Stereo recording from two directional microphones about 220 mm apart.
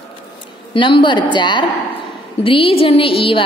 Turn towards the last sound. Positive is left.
turn(degrees=25)  # may be behind; listen again after turning